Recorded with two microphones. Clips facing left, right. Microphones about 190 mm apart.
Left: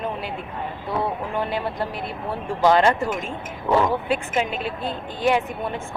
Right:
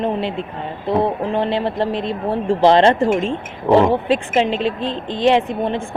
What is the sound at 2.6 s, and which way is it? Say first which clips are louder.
Speech: right 4 dB; 30° right (ahead or behind).